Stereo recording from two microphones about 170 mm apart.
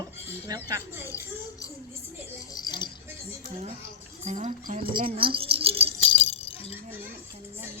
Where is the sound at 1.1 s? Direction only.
20° left (ahead or behind).